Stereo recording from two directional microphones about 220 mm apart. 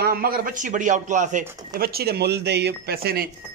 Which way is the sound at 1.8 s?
45° right (ahead or behind).